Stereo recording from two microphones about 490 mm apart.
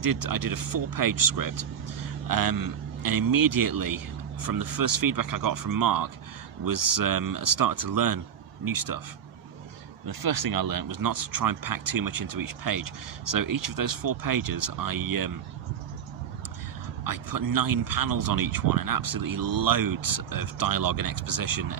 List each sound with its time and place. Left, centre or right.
0.0 s speech: right
10.0 s speech: right
17.0 s speech: right